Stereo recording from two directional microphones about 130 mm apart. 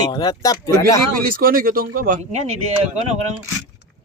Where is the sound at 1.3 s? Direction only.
90° right.